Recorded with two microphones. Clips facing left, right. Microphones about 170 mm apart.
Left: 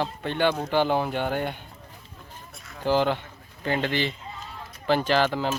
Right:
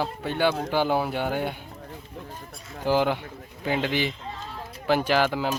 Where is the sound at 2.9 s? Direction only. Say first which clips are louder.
Even; 10° right (ahead or behind).